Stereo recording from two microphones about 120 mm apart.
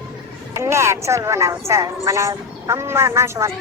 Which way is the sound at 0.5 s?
25° right (ahead or behind).